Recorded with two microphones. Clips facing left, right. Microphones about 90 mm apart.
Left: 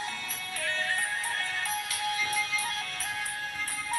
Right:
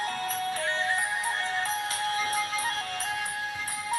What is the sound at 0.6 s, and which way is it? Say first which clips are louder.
Music: left 1 dB; 25° right (ahead or behind).